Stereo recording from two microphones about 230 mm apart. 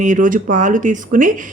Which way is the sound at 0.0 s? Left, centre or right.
Right.